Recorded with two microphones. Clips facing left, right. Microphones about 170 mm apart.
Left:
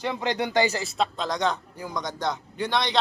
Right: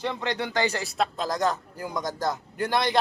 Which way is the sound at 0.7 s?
Centre (ahead or behind).